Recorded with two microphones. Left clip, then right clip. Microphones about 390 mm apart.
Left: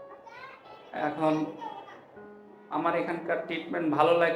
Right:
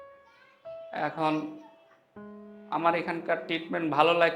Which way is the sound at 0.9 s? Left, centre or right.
Right.